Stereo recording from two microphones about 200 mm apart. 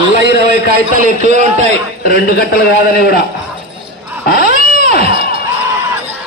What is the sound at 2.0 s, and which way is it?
A man's voice, 50° left (ahead or behind).